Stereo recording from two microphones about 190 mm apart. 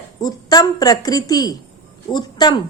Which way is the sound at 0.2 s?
20° left (ahead or behind).